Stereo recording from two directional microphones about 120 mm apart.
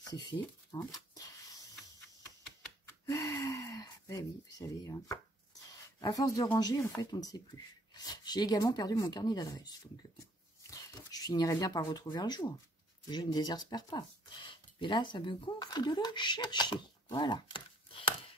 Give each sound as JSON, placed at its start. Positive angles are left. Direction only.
{"t": 0.1, "sound": "speech", "side_deg": 35}
{"t": 0.7, "sound": "a sound", "side_deg": 30}
{"t": 3.1, "sound": "gasp", "side_deg": 25}
{"t": 7.0, "sound": "speech", "side_deg": 30}
{"t": 10.7, "sound": "speech", "side_deg": 30}